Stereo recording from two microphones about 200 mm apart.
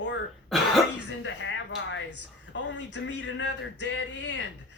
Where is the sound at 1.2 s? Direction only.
70° left (ahead or behind).